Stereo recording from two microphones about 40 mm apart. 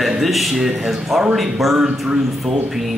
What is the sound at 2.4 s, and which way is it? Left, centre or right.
Speech, centre.